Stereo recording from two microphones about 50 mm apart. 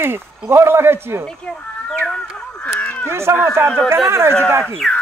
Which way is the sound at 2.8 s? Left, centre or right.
Left.